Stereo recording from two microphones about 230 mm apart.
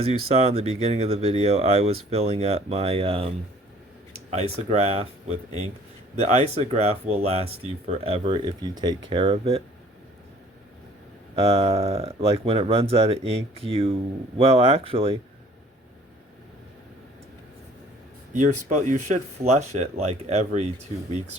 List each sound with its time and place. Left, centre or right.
0.4 s speech: right
6.1 s speech: right
11.3 s speech: right
18.3 s speech: right